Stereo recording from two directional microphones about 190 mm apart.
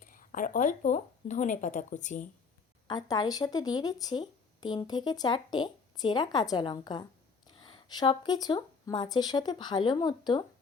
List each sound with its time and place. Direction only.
0.0 s speech: 45° left (ahead or behind)
2.8 s speech: 20° left (ahead or behind)